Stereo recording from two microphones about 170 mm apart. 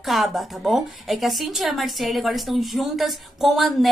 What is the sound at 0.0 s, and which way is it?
A woman's voice, centre (ahead or behind).